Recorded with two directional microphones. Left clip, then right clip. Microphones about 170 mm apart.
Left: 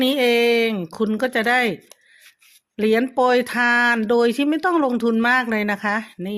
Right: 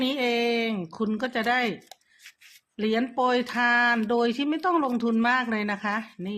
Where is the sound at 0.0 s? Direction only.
45° left (ahead or behind).